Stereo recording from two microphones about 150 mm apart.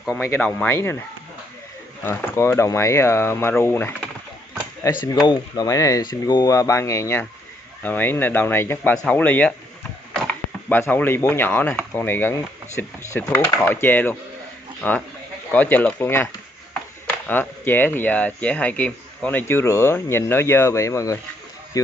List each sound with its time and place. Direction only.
0.4 s speech: 10° left (ahead or behind)
2.0 s speech: 15° left (ahead or behind)
10.7 s speech: 10° left (ahead or behind)